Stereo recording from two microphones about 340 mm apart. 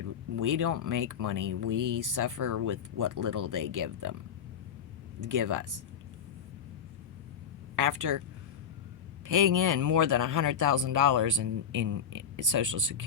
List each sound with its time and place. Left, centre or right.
0.0 s speech: right
5.2 s speech: right
7.8 s speech: right
9.2 s speech: right